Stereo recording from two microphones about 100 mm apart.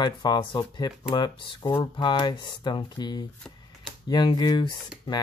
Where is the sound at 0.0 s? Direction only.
45° left (ahead or behind).